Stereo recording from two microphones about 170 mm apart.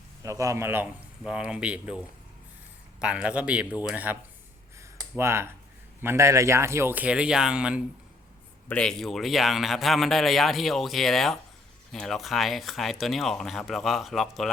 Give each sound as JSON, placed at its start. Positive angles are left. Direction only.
{"t": 0.2, "sound": "a man's voice", "side_deg": -20}